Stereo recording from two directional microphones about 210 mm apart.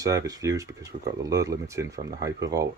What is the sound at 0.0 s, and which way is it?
Speech, 15° right (ahead or behind).